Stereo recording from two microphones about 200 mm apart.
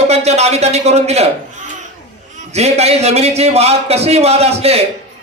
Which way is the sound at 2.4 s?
35° right (ahead or behind).